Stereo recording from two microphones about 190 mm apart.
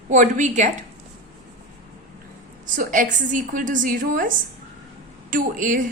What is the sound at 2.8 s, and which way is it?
A woman's voice, 45° right (ahead or behind).